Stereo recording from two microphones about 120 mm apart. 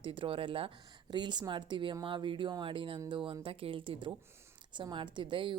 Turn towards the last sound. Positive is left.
turn(degrees=-40)  # may be behind; listen again after turning